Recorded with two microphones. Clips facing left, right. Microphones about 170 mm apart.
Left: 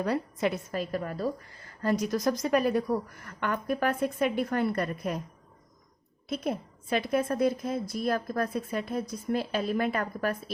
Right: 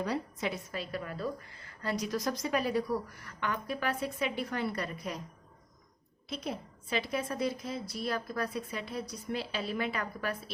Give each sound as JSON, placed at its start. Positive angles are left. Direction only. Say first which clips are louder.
{"t": 0.0, "sound": "a woman's voice", "louder": "left 5 dB", "side_deg": 55}
{"t": 6.2, "sound": "a woman's voice", "louder": "left 6 dB", "side_deg": 55}